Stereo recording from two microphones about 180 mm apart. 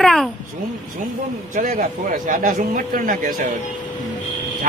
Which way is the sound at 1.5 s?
50° right (ahead or behind).